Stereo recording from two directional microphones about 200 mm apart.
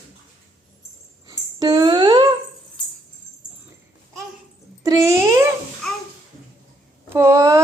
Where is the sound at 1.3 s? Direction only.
20° right (ahead or behind).